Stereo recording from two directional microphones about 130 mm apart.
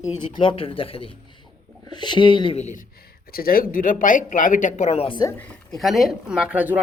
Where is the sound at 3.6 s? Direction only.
90° left; by 5.1 s 50° left (ahead or behind).